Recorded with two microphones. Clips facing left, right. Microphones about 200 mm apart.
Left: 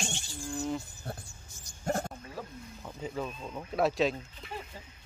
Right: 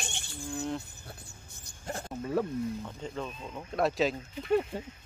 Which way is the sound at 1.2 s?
60° right (ahead or behind).